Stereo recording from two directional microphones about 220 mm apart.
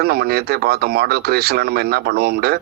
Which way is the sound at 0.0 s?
45° right (ahead or behind).